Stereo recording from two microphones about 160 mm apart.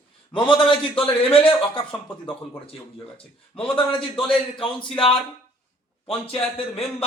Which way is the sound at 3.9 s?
35° left (ahead or behind).